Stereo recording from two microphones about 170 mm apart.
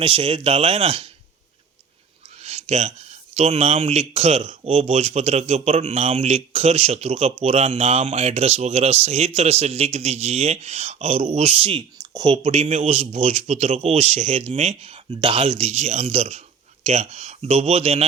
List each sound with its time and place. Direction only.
0.0 s speech: 30° right (ahead or behind)
2.4 s speech: 40° right (ahead or behind)
12.5 s speech: 45° right (ahead or behind)
15.1 s speech: 30° right (ahead or behind)